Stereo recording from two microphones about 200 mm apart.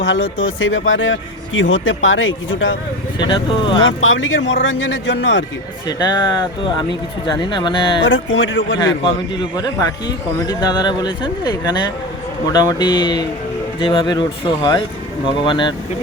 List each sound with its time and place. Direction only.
0.0 s speech: 65° left (ahead or behind)
3.2 s speech: 25° left (ahead or behind)
3.8 s speech: 75° left (ahead or behind)
6.0 s speech: 20° left (ahead or behind)
8.0 s speech: 70° left (ahead or behind)
9.3 s speech: 20° left (ahead or behind)